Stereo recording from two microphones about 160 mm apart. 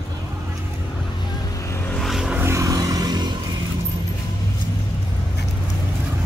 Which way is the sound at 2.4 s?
20° right (ahead or behind).